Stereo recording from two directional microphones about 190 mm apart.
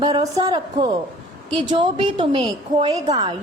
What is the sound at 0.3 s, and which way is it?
A woman's voice, 20° right (ahead or behind).